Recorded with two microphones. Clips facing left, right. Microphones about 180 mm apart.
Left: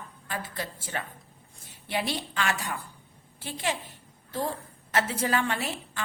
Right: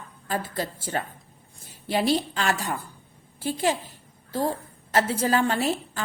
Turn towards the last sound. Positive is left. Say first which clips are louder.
# right 7 dB
turn(degrees=-35)  # may be behind; listen again after turning